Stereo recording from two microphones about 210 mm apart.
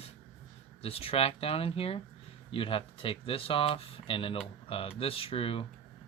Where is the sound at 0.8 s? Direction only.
30° left (ahead or behind).